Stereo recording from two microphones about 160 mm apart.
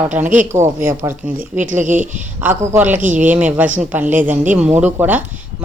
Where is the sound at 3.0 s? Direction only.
55° right (ahead or behind).